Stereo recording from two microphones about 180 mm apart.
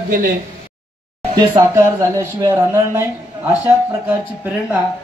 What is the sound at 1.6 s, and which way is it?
Speech, 20° right (ahead or behind).